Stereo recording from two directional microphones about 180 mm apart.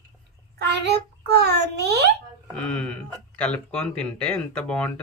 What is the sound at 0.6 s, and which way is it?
A child's voice, 65° right (ahead or behind).